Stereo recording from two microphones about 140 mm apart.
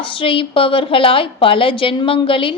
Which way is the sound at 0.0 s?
40° left (ahead or behind).